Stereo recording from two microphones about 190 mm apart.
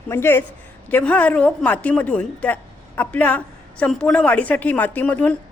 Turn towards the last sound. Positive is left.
turn(degrees=10)  # may be behind; listen again after turning